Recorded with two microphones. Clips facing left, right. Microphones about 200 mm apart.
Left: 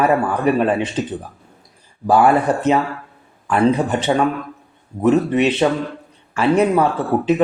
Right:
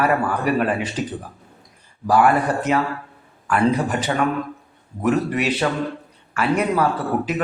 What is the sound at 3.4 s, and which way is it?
Speech, 25° left (ahead or behind).